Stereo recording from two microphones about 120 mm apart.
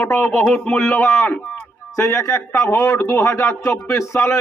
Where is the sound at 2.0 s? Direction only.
25° left (ahead or behind).